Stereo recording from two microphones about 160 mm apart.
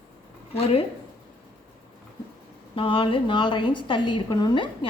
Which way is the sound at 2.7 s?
35° left (ahead or behind).